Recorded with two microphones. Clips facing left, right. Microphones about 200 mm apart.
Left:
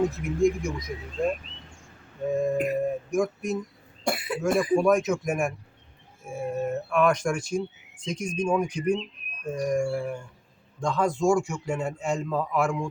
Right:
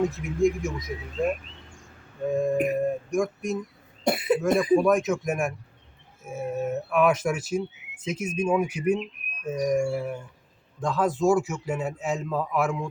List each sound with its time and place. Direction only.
0.1 s speech: centre (ahead or behind)
2.2 s speech: centre (ahead or behind)
4.0 s speech: 20° right (ahead or behind)
4.4 s speech: centre (ahead or behind)